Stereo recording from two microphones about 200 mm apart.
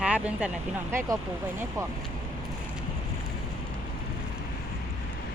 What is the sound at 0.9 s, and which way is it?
Speech, 15° right (ahead or behind).